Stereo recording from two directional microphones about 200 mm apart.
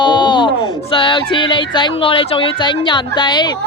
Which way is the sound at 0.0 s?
25° left (ahead or behind).